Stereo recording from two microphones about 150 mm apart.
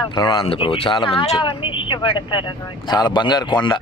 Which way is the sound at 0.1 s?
30° left (ahead or behind).